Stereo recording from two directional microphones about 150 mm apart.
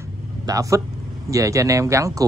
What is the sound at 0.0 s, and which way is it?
Vehicle, 20° right (ahead or behind).